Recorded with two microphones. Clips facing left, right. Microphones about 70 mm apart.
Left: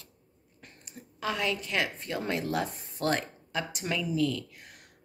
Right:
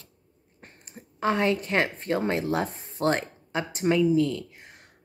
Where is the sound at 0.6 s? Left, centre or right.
Right.